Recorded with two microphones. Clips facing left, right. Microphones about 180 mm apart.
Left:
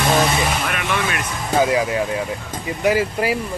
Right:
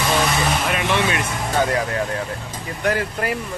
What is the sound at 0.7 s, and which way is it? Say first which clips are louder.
Speech: right 2 dB; 30° right (ahead or behind).